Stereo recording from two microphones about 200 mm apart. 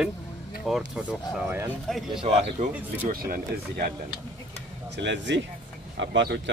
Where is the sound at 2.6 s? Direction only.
40° right (ahead or behind).